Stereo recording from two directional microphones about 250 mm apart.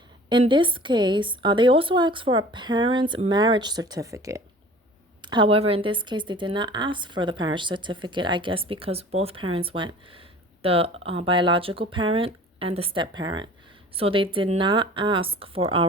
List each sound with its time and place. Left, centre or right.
0.3 s speech: centre